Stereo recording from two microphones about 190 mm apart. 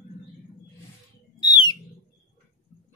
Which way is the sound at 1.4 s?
25° left (ahead or behind).